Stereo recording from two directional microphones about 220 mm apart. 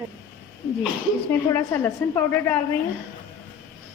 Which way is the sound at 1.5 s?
10° left (ahead or behind).